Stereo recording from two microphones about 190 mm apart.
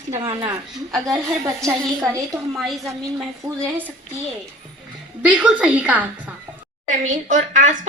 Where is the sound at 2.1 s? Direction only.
15° right (ahead or behind).